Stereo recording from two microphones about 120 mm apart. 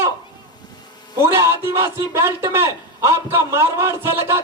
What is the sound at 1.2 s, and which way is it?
A man's voice, 20° right (ahead or behind).